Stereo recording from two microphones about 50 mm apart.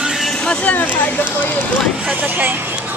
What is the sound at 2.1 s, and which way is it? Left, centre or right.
Speech, right.